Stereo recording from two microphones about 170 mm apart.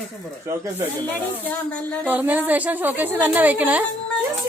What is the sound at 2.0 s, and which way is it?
A woman's voice, 10° right (ahead or behind).